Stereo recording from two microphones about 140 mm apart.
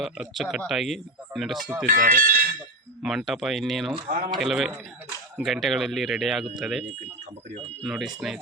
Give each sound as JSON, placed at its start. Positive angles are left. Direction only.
{"t": 0.3, "sound": "speech", "side_deg": 0}
{"t": 1.9, "sound": "speech", "side_deg": -75}
{"t": 3.0, "sound": "speech", "side_deg": -5}